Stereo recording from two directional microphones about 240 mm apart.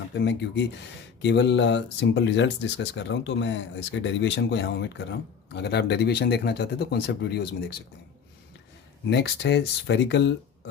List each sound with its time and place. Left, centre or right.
0.1 s speech: left
9.0 s speech: left